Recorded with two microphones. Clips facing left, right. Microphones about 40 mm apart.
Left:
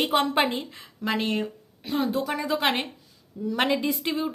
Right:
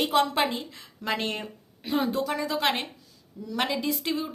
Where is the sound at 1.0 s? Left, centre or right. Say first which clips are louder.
Left 3 dB; centre.